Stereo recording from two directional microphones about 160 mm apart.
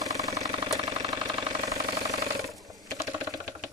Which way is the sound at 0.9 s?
25° right (ahead or behind).